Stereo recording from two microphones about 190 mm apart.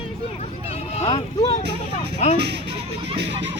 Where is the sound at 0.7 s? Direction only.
35° left (ahead or behind).